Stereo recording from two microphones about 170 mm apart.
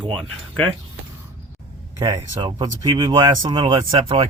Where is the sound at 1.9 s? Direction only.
20° right (ahead or behind).